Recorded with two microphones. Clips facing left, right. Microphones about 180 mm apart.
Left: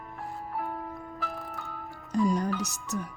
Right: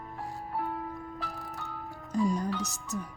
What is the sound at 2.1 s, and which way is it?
Music, 70° left (ahead or behind).